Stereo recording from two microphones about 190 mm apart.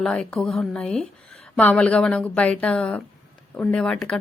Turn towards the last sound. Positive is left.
turn(degrees=5)  # may be behind; listen again after turning